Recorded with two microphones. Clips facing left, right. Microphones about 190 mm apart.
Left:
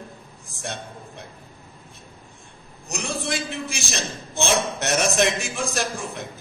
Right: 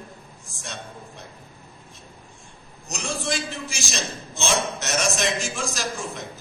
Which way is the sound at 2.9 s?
60° left (ahead or behind).